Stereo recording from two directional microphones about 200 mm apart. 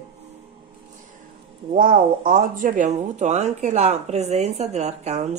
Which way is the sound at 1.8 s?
45° right (ahead or behind).